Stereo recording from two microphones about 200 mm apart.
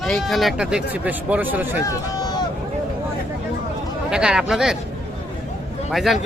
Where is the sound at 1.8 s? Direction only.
20° left (ahead or behind).